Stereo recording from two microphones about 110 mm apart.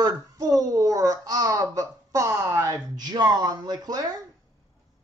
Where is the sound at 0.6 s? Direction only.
30° right (ahead or behind).